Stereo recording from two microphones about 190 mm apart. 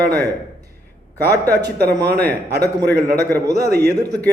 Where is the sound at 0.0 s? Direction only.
55° right (ahead or behind).